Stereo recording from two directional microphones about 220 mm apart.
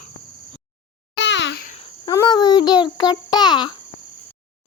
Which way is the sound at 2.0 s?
15° left (ahead or behind).